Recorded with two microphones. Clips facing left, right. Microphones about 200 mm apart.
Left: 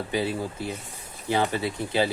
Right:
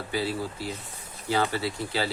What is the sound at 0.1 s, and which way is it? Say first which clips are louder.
Speech: left 1 dB; 20° left (ahead or behind).